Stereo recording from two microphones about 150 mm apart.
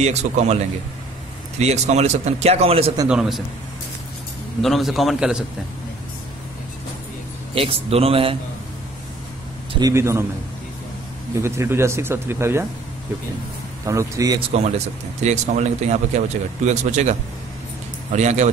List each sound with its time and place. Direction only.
0.0 s speech: 50° right (ahead or behind)
1.6 s speech: 45° right (ahead or behind)
3.1 s a man's voice: 5° right (ahead or behind)
4.6 s a man's voice: centre (ahead or behind)
7.5 s a man's voice: 40° right (ahead or behind)
9.8 s speech: 20° right (ahead or behind)
11.4 s speech: 15° right (ahead or behind)
13.8 s speech: 20° right (ahead or behind)
14.5 s speech: 45° right (ahead or behind)